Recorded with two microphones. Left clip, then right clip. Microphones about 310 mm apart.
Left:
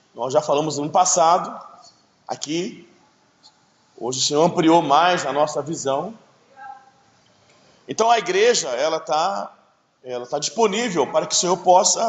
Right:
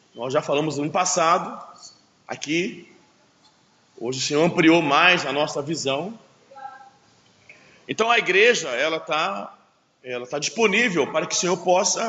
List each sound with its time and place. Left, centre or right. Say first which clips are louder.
0.2 s a man's voice: left 3 dB; centre
4.0 s a man's voice: left 3 dB; centre
7.9 s a man's voice: left 2 dB; centre